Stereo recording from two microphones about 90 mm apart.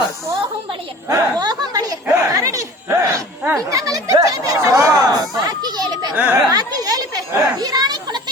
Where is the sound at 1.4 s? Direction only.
50° right (ahead or behind).